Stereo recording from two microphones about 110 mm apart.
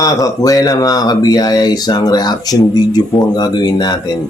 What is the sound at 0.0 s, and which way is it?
Speech, 35° left (ahead or behind).